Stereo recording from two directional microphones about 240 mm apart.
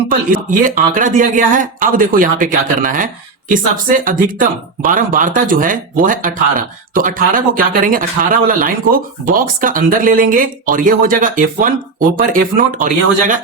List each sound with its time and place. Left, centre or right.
0.1 s speech: right